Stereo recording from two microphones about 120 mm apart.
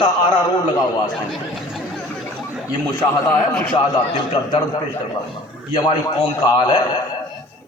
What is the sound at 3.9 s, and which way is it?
Speech, 40° left (ahead or behind).